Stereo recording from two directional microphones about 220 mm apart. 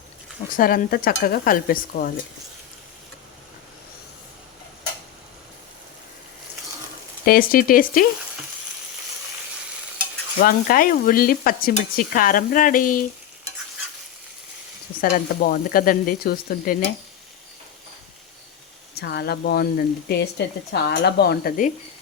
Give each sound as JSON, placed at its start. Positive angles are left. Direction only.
{"t": 0.5, "sound": "stir", "side_deg": 40}
{"t": 7.3, "sound": "stir", "side_deg": 40}
{"t": 10.4, "sound": "stir", "side_deg": 40}
{"t": 15.1, "sound": "stir", "side_deg": 40}
{"t": 18.9, "sound": "speech", "side_deg": 45}